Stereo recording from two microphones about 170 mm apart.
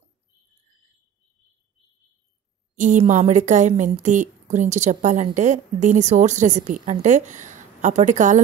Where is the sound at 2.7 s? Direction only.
45° right (ahead or behind).